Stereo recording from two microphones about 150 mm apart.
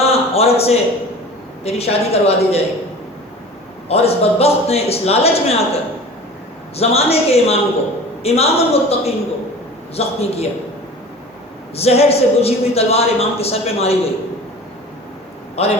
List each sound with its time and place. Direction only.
0.0 s a sound: 40° left (ahead or behind)
1.6 s speech: 45° left (ahead or behind)
3.8 s speech: 45° left (ahead or behind)
11.8 s speech: 45° left (ahead or behind)
15.6 s speech: 45° left (ahead or behind)